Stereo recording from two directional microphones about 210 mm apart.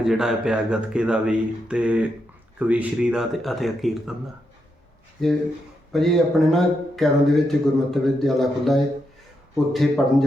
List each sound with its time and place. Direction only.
0.0 s speech: centre (ahead or behind)
5.9 s speech: centre (ahead or behind)